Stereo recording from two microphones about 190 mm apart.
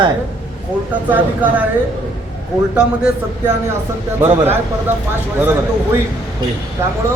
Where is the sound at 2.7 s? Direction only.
5° right (ahead or behind).